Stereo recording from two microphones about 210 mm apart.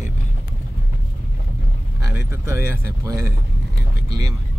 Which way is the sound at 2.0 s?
15° right (ahead or behind).